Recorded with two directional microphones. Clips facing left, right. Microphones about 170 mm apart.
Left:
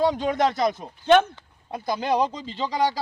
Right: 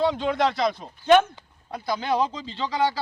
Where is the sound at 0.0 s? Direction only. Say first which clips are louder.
Left 1 dB; 40° left (ahead or behind).